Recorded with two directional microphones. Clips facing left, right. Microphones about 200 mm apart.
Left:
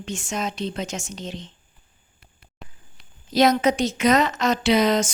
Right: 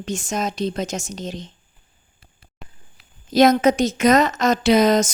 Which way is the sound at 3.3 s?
45° right (ahead or behind).